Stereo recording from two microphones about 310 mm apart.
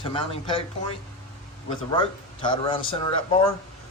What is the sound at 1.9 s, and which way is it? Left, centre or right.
Speech, centre.